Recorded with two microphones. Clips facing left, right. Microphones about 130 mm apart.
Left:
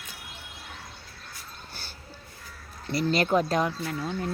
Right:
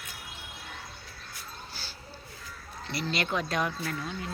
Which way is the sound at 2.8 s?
45° left (ahead or behind).